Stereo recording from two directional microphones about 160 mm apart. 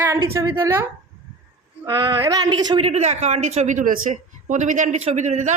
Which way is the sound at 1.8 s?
20° right (ahead or behind).